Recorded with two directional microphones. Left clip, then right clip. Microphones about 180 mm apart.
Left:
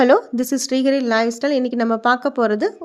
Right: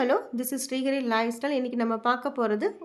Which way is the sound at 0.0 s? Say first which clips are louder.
Left 11 dB; 40° left (ahead or behind).